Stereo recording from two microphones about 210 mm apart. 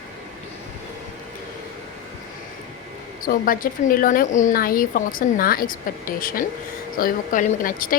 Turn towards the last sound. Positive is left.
turn(degrees=40)  # may be behind; listen again after turning